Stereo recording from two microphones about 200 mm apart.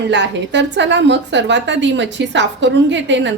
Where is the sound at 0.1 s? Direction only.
60° right (ahead or behind).